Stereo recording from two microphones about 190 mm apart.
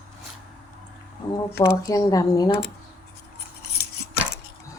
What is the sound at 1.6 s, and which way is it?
Speech, 15° left (ahead or behind).